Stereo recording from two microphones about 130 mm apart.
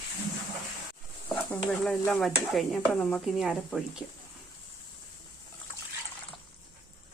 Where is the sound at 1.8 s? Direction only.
10° left (ahead or behind).